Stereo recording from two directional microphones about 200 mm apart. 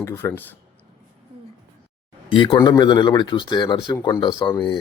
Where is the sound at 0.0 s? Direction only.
15° left (ahead or behind).